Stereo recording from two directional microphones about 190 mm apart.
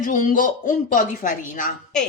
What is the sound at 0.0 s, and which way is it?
Speech, 45° left (ahead or behind).